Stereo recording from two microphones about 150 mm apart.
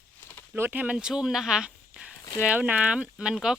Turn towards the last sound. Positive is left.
turn(degrees=-5)  # may be behind; listen again after turning